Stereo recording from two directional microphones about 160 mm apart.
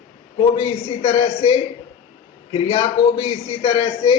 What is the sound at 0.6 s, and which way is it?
A man's voice, 40° left (ahead or behind).